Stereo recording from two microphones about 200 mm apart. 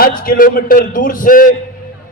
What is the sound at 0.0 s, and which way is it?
A man's voice, 45° left (ahead or behind).